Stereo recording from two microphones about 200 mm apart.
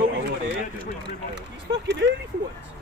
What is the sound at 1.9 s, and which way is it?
Speech, 60° right (ahead or behind).